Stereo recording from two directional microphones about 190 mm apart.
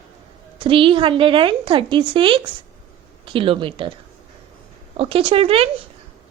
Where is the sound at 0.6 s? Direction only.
25° right (ahead or behind).